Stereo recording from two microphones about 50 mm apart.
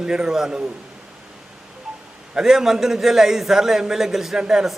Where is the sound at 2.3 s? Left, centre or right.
Centre.